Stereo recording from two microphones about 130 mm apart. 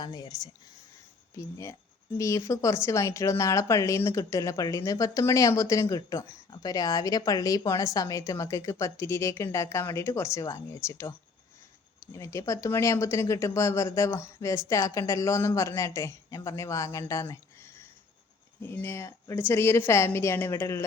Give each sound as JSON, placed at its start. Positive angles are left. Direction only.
{"t": 0.0, "sound": "speech", "side_deg": 30}
{"t": 2.1, "sound": "speech", "side_deg": 25}
{"t": 12.1, "sound": "speech", "side_deg": 25}